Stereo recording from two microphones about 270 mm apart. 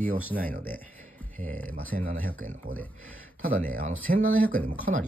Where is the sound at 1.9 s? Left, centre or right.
Right.